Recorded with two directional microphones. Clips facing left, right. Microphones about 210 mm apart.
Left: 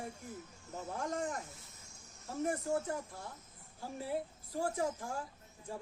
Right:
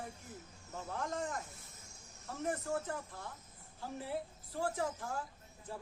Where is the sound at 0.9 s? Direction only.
15° left (ahead or behind).